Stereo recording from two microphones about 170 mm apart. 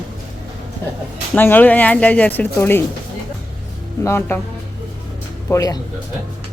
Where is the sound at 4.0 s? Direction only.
15° left (ahead or behind).